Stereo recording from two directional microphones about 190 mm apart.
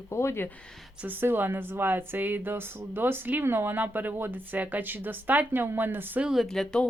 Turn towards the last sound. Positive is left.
turn(degrees=5)  # may be behind; listen again after turning